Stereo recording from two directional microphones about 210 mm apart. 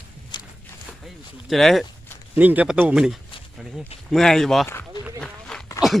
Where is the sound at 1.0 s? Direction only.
Centre (ahead or behind).